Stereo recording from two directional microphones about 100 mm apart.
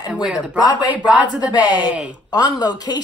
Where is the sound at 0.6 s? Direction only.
45° left (ahead or behind).